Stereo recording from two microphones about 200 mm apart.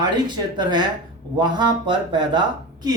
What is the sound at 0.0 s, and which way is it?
A man's voice, 20° right (ahead or behind).